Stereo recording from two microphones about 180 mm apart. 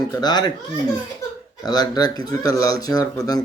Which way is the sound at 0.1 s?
25° left (ahead or behind).